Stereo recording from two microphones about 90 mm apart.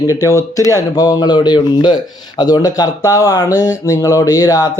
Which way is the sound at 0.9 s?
45° left (ahead or behind).